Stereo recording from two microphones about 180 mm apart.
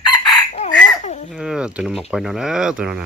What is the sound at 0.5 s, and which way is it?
Fowl, 40° left (ahead or behind).